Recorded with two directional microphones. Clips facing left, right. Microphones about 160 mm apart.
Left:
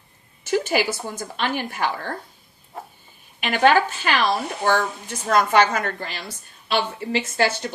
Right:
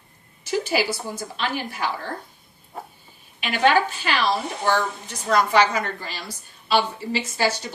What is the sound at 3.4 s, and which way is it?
Speech, 50° left (ahead or behind).